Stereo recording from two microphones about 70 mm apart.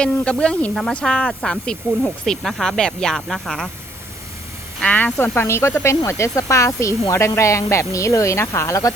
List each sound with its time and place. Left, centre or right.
0.0 s speech: centre
0.7 s speech: centre
4.9 s speech: left